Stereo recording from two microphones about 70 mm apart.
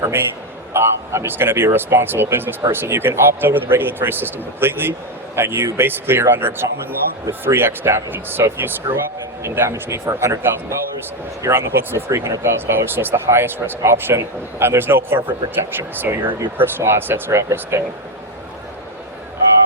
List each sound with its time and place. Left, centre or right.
0.0 s a man's voice: right
12.1 s a man's voice: right